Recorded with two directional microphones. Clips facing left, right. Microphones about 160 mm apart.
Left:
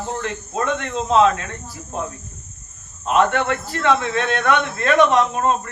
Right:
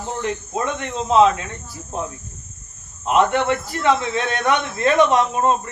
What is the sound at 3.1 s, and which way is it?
Speech, 15° right (ahead or behind).